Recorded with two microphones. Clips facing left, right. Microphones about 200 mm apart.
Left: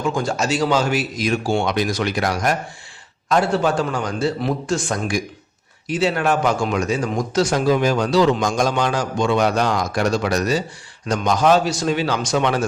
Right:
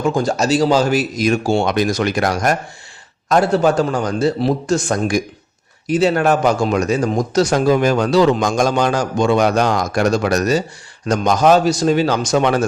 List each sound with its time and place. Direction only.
0.0 s a man's voice: 40° right (ahead or behind)